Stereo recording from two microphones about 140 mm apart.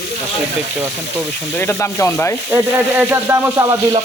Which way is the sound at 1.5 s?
15° left (ahead or behind).